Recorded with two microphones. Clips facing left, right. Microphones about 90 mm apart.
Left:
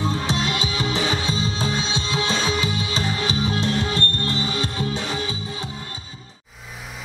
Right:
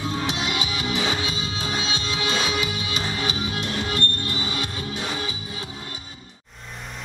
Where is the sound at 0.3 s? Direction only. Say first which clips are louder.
Left 3 dB; 30° left (ahead or behind).